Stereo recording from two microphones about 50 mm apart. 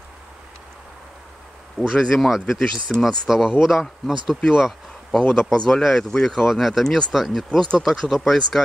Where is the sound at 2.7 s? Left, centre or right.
Centre.